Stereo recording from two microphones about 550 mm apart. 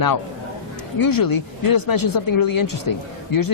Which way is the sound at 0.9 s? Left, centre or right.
Left.